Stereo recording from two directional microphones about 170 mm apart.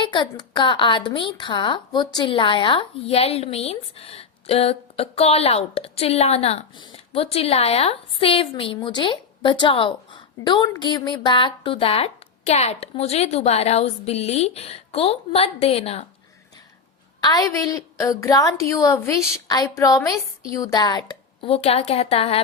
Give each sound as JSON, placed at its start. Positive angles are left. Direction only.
{"t": 0.0, "sound": "speech", "side_deg": 25}
{"t": 17.2, "sound": "a woman's voice", "side_deg": 20}
{"t": 21.4, "sound": "speech", "side_deg": 35}